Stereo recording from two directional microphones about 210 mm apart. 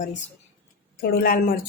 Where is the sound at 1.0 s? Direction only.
45° left (ahead or behind).